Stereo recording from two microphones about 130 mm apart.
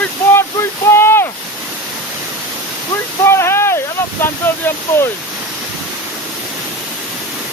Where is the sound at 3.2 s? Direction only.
20° left (ahead or behind).